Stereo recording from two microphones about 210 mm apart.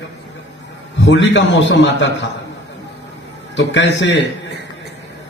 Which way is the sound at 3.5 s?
60° left (ahead or behind).